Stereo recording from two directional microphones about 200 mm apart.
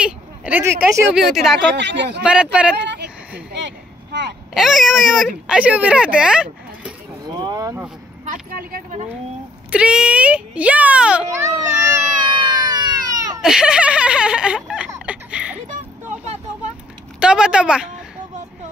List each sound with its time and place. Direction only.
0.0 s speech: 5° right (ahead or behind)
1.6 s speech: 60° right (ahead or behind)
2.2 s speech: 5° right (ahead or behind)
2.8 s a sound: 60° right (ahead or behind)
3.5 s vehicle: 60° right (ahead or behind)
4.6 s speech: centre (ahead or behind)
7.2 s boat: 20° right (ahead or behind)
8.3 s speech: 45° right (ahead or behind)
9.7 s speech: 5° right (ahead or behind)
11.2 s a child's voice: 15° right (ahead or behind)
12.2 s baby cry: 20° right (ahead or behind)
13.4 s speech: 5° right (ahead or behind)
14.9 s a sound: 5° right (ahead or behind)
17.2 s speech: 5° right (ahead or behind)